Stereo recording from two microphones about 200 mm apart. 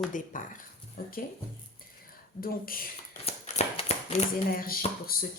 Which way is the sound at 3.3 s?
30° left (ahead or behind).